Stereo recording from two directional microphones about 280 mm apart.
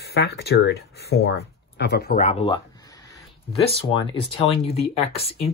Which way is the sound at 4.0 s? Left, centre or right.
Centre.